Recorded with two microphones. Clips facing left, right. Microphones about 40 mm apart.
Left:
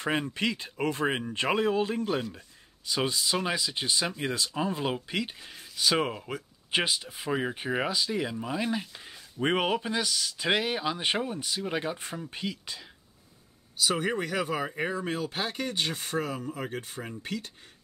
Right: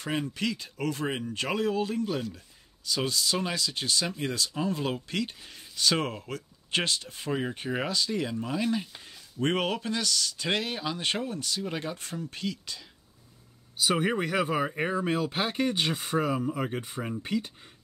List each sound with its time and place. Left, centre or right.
0.0 s speech: left
13.7 s speech: centre
15.7 s speech: centre
16.3 s speech: right